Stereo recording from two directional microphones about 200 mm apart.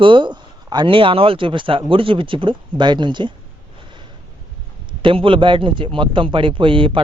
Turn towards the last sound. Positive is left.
turn(degrees=-25)  # may be behind; listen again after turning